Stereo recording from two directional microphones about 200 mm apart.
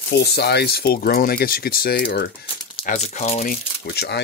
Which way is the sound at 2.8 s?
30° left (ahead or behind).